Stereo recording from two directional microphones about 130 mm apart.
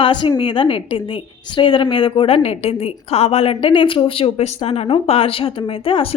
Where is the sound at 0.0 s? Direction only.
35° left (ahead or behind).